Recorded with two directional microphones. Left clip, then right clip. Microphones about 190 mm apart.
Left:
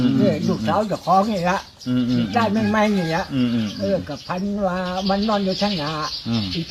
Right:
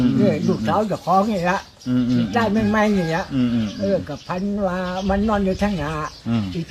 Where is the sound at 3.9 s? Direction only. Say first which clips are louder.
Right 1 dB; 15° right (ahead or behind).